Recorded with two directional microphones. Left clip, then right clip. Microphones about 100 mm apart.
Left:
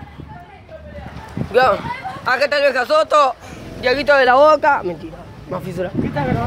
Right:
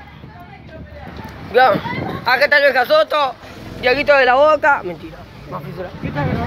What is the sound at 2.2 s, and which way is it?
Speech, 20° left (ahead or behind).